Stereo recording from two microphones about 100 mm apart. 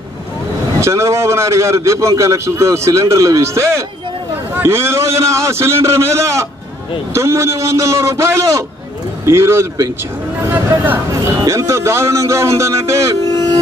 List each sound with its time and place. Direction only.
0.7 s a man's voice: 30° right (ahead or behind)
11.1 s a man's voice: 30° right (ahead or behind)